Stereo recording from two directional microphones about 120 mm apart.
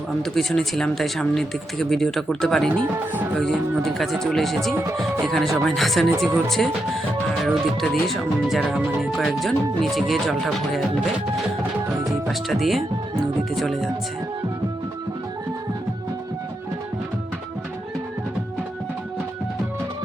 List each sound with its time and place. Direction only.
0.2 s speech: 5° left (ahead or behind)
4.7 s speech: 20° right (ahead or behind)
5.2 s speech: centre (ahead or behind)
12.3 s speech: centre (ahead or behind)